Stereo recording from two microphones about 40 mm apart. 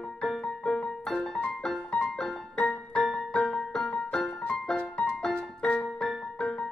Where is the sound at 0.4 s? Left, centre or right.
Centre.